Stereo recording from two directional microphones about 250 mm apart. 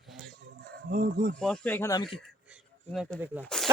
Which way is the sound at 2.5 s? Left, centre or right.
Centre.